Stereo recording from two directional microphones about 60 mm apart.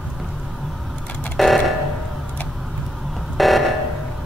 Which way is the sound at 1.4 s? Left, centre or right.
Centre.